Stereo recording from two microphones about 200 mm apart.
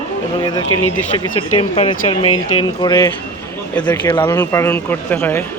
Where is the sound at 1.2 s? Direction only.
25° left (ahead or behind).